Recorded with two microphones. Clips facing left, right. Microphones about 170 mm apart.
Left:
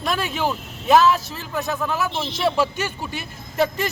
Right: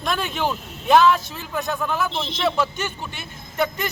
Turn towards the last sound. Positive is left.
turn(degrees=30)  # may be behind; listen again after turning